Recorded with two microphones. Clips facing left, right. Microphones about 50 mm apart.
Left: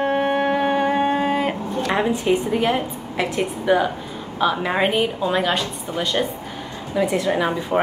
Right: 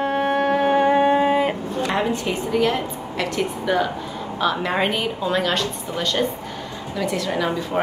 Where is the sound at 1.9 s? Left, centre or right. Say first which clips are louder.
Left 5 dB; centre.